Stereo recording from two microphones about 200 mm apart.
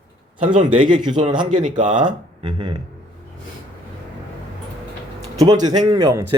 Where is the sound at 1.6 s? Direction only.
40° right (ahead or behind).